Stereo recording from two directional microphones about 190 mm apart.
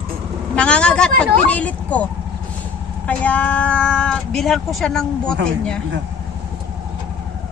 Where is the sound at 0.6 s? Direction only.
5° left (ahead or behind).